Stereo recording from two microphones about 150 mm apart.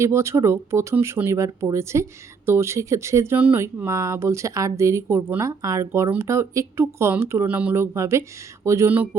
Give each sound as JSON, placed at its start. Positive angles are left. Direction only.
{"t": 0.0, "sound": "speech", "side_deg": -20}